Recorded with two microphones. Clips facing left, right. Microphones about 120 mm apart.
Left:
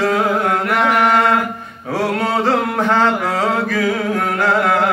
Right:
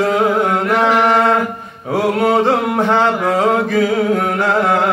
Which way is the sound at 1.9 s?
15° right (ahead or behind).